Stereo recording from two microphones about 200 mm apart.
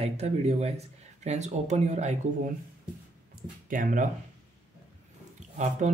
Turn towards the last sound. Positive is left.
turn(degrees=-35)  # may be behind; listen again after turning